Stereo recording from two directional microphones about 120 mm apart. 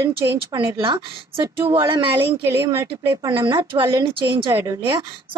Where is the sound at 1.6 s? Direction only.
45° right (ahead or behind).